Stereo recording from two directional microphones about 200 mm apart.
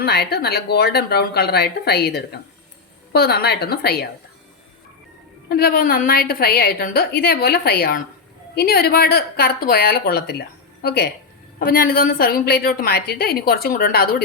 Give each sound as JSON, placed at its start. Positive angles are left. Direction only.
{"t": 0.0, "sound": "a woman's voice", "side_deg": 55}
{"t": 5.5, "sound": "a woman's voice", "side_deg": 50}